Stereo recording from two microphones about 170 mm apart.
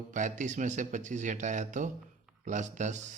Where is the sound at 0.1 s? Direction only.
45° right (ahead or behind).